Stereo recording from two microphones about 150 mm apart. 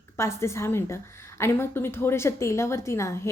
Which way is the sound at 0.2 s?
20° left (ahead or behind).